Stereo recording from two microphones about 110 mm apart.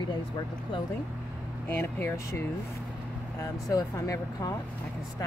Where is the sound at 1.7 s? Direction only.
20° left (ahead or behind).